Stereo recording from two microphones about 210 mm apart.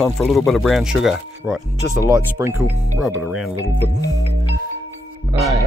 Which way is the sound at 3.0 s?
Centre (ahead or behind).